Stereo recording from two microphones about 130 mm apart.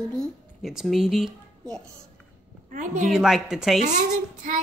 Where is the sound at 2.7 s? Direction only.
75° right (ahead or behind).